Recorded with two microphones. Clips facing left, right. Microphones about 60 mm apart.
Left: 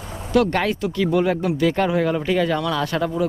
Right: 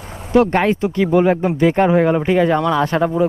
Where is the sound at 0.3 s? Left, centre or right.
Right.